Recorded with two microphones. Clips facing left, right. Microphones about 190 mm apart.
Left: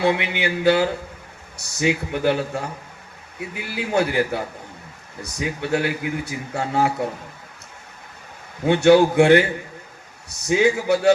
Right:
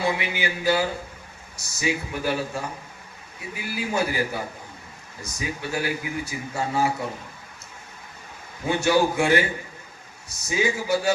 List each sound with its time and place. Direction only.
0.0 s a man's voice: 65° left (ahead or behind)
8.6 s a man's voice: 65° left (ahead or behind)
10.4 s a man's voice: 65° left (ahead or behind)